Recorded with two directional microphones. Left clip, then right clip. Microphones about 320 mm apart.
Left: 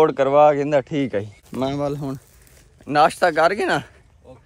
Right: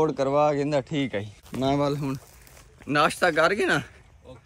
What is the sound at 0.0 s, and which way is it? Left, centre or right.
Speech, centre.